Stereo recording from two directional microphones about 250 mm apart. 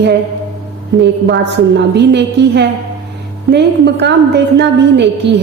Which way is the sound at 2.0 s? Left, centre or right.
Right.